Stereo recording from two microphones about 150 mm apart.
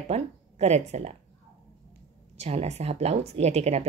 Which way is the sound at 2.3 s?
45° right (ahead or behind).